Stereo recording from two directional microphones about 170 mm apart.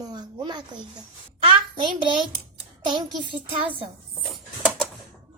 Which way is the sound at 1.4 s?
30° right (ahead or behind).